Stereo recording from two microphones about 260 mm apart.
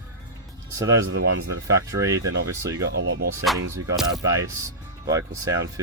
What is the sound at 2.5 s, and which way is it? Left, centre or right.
Speech, centre.